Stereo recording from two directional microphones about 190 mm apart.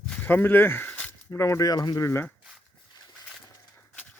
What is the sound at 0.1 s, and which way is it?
Speech, 10° left (ahead or behind).